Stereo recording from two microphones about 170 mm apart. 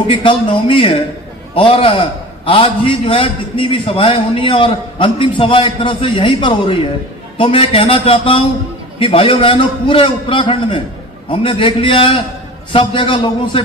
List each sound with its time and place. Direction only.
0.2 s a man's voice: 30° left (ahead or behind)